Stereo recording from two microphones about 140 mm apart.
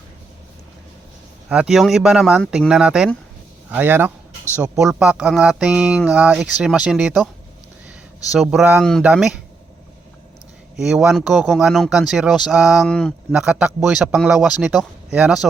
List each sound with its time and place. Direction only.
1.5 s a man's voice: 5° right (ahead or behind)
8.3 s a man's voice: 5° right (ahead or behind)
8.8 s a man's voice: centre (ahead or behind)
10.8 s a man's voice: 5° right (ahead or behind)
13.3 s a man's voice: 5° right (ahead or behind)